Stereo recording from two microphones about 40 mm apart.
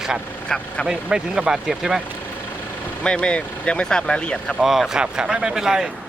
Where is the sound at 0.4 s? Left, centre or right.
Left.